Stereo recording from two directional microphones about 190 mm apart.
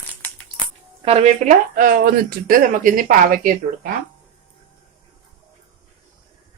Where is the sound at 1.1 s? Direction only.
35° right (ahead or behind).